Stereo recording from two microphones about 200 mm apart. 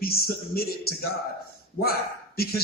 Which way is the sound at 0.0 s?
50° left (ahead or behind).